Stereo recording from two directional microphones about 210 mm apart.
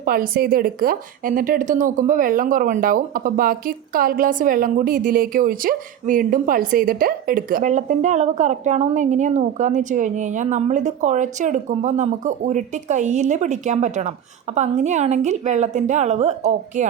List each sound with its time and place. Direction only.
0.0 s a woman's voice: 45° right (ahead or behind)